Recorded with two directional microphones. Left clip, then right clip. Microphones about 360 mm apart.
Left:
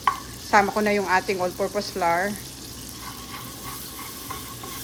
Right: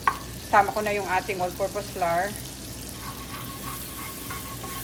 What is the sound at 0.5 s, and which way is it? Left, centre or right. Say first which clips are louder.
Speech: left 2 dB; centre.